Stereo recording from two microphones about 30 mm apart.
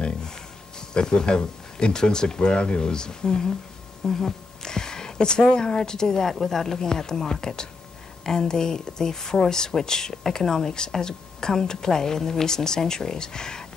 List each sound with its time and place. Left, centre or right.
0.7 s a woman's voice: left